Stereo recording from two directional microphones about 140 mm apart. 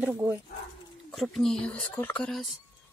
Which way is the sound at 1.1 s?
Centre (ahead or behind).